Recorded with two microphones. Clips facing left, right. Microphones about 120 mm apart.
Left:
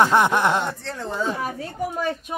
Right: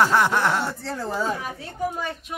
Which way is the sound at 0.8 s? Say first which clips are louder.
Even; 5° right (ahead or behind).